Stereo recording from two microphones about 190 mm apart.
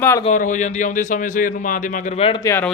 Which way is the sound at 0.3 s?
40° left (ahead or behind).